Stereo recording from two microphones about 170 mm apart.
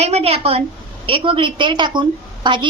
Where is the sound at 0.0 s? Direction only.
40° right (ahead or behind).